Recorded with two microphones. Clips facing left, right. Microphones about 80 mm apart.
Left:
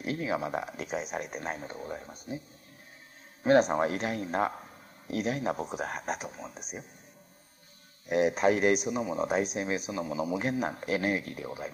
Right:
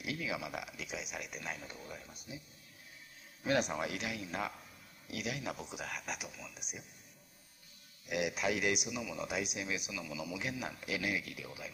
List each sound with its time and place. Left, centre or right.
0.0 s speech: left
3.4 s speech: left
8.1 s speech: left